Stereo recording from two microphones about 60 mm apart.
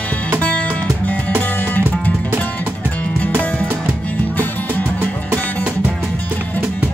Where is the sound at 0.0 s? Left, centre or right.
Left.